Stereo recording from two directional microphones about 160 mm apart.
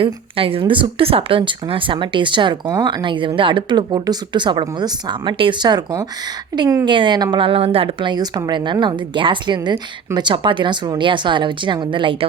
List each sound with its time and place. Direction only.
0.0 s a woman's voice: 35° right (ahead or behind)